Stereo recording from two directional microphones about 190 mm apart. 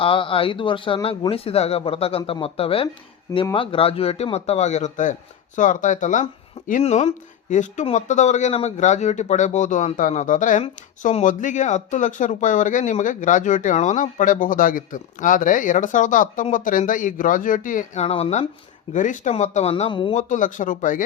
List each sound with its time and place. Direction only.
0.0 s speech: 30° left (ahead or behind)
20.1 s speech: 40° left (ahead or behind)